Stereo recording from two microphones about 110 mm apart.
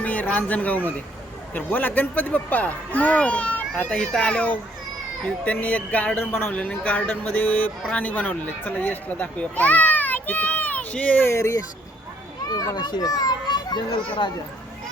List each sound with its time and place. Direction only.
0.0 s speech: 15° left (ahead or behind)
12.5 s a child's voice: 40° left (ahead or behind)